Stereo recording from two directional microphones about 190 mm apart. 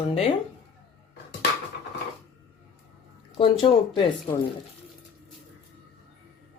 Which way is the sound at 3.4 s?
30° left (ahead or behind).